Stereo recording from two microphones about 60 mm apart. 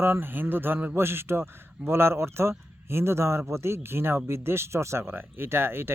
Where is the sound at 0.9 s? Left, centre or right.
Right.